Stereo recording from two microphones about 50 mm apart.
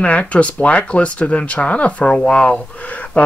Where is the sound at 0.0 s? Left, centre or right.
Left.